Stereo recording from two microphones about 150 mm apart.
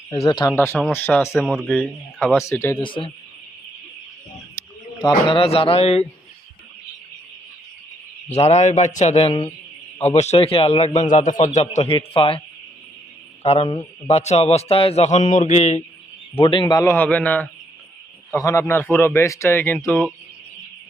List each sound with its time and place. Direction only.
0.2 s speech: 25° left (ahead or behind)
0.5 s a man's voice: 15° left (ahead or behind)
1.3 s speech: 5° right (ahead or behind)
2.3 s a man's voice: 20° left (ahead or behind)
2.7 s a man's voice: 35° left (ahead or behind)
4.5 s speech: 30° left (ahead or behind)
8.3 s a man's voice: 45° left (ahead or behind)
9.3 s speech: 30° left (ahead or behind)
10.2 s a man's voice: 45° left (ahead or behind)
11.1 s a man's voice: 60° left (ahead or behind)
11.3 s a man's voice: 40° left (ahead or behind)
13.4 s a man's voice: 45° left (ahead or behind)
16.4 s a man's voice: 35° left (ahead or behind)
16.8 s a man's voice: 15° left (ahead or behind)